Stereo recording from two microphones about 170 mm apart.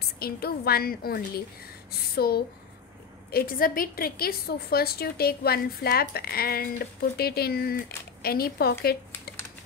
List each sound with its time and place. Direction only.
0.2 s a woman's voice: 65° left (ahead or behind)
1.9 s a sound: 65° left (ahead or behind)
3.3 s a woman's voice: 60° left (ahead or behind)